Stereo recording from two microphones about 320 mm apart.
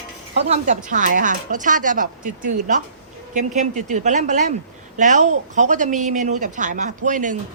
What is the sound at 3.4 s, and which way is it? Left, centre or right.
Speech, right.